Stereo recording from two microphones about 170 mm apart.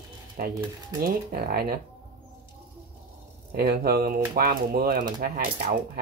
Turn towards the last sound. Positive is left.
turn(degrees=-55)  # may be behind; listen again after turning